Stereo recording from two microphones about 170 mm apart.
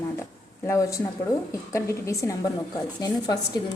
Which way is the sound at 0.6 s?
20° left (ahead or behind).